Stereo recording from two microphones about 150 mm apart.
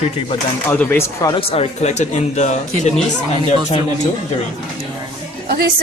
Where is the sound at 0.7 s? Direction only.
15° left (ahead or behind).